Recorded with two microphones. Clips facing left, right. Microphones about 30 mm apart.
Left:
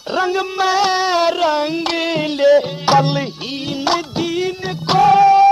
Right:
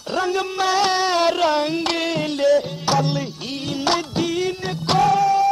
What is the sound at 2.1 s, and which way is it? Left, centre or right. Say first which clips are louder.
Music: left 6 dB; left.